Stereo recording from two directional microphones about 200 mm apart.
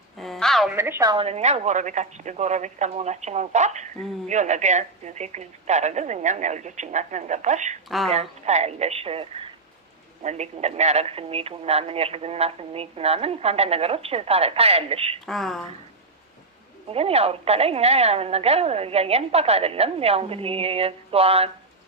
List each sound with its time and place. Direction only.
0.2 s a sound: centre (ahead or behind)
0.8 s a woman's voice: 15° right (ahead or behind)
1.2 s speech: 35° right (ahead or behind)
7.9 s a woman's voice: centre (ahead or behind)
8.1 s speech: 35° right (ahead or behind)
15.3 s a woman's voice: centre (ahead or behind)
16.9 s speech: 30° right (ahead or behind)